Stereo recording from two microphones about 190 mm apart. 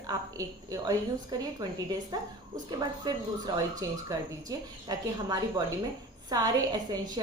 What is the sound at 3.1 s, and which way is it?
A woman's voice, 20° right (ahead or behind).